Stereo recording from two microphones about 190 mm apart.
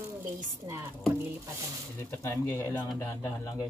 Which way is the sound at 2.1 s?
15° left (ahead or behind).